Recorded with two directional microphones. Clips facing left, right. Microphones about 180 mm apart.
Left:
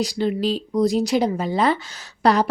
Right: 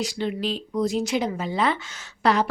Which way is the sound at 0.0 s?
35° left (ahead or behind).